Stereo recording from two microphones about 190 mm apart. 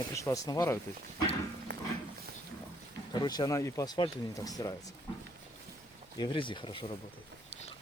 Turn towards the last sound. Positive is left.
turn(degrees=25)  # may be behind; listen again after turning